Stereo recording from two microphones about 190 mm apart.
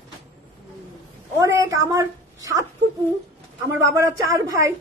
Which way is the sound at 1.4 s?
15° right (ahead or behind).